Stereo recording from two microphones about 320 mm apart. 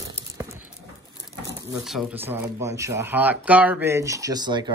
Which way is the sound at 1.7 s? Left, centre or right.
Centre.